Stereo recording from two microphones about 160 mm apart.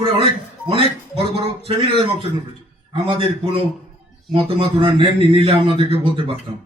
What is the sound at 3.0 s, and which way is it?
Speech, 35° right (ahead or behind).